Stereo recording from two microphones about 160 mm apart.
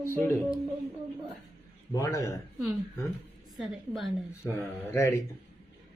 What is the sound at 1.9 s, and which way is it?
Speech, 20° left (ahead or behind).